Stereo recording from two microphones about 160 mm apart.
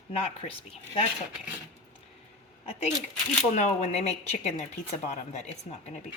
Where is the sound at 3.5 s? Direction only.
45° left (ahead or behind).